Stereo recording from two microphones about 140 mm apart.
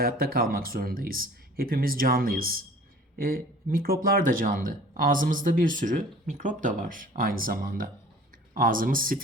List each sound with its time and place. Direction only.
0.0 s speech: 90° right